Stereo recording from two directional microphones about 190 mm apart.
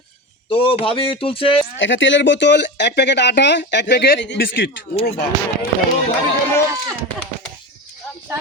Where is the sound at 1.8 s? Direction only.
75° left (ahead or behind); by 4.7 s 55° left (ahead or behind).